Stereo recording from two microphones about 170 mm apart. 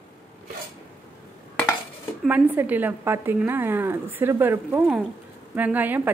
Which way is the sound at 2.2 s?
10° right (ahead or behind).